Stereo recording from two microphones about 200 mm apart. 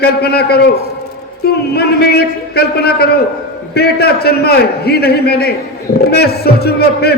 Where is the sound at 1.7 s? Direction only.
50° left (ahead or behind).